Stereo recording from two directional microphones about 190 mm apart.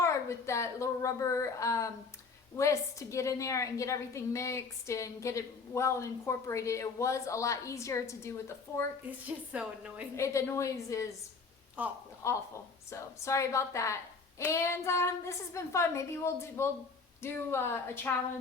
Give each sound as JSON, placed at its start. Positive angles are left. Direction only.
{"t": 0.0, "sound": "a woman's voice", "side_deg": 15}
{"t": 9.0, "sound": "a woman's voice", "side_deg": -10}
{"t": 10.2, "sound": "a woman's voice", "side_deg": 15}
{"t": 11.8, "sound": "a woman's voice", "side_deg": -5}
{"t": 12.2, "sound": "a woman's voice", "side_deg": 15}